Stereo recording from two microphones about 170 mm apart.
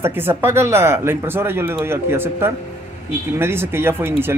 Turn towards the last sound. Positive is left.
turn(degrees=-15)  # may be behind; listen again after turning